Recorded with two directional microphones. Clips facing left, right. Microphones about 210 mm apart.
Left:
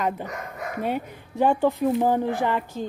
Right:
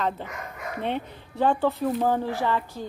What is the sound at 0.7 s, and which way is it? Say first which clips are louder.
Speech: left 2 dB; 10° left (ahead or behind).